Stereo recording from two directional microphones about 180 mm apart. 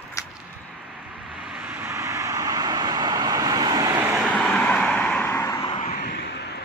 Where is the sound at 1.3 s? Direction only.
5° right (ahead or behind); by 4.0 s 20° right (ahead or behind).